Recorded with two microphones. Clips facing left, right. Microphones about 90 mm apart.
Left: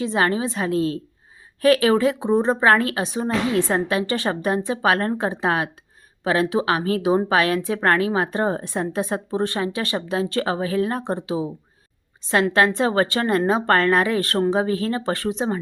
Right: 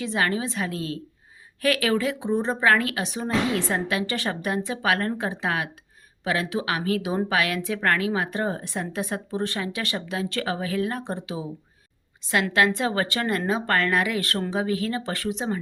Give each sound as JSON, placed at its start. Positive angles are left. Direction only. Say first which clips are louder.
{"t": 0.0, "sound": "a woman's voice", "louder": "left 4 dB", "side_deg": 30}